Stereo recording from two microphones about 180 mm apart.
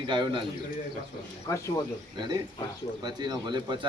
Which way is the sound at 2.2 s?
20° right (ahead or behind).